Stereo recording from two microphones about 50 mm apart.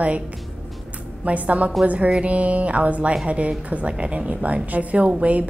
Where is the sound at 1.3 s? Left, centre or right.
Right.